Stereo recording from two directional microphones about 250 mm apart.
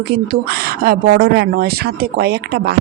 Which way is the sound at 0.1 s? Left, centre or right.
Right.